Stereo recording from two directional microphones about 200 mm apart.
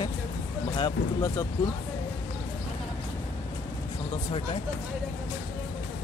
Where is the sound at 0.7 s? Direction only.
20° left (ahead or behind).